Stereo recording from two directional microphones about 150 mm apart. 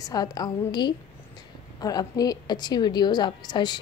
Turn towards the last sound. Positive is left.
turn(degrees=30)  # may be behind; listen again after turning